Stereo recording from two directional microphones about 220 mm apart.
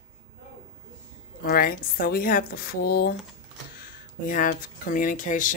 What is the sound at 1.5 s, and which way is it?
A woman's voice, 40° left (ahead or behind).